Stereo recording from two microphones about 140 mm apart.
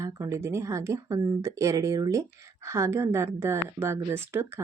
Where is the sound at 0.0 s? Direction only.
20° right (ahead or behind).